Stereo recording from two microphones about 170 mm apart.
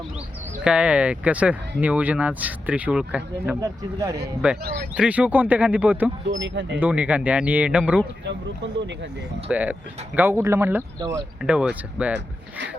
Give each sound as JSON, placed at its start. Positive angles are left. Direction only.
{"t": 0.6, "sound": "speech", "side_deg": -5}
{"t": 6.2, "sound": "speech", "side_deg": -90}
{"t": 6.7, "sound": "speech", "side_deg": -10}
{"t": 8.2, "sound": "speech", "side_deg": -90}
{"t": 9.5, "sound": "speech", "side_deg": -10}
{"t": 12.1, "sound": "speech", "side_deg": -90}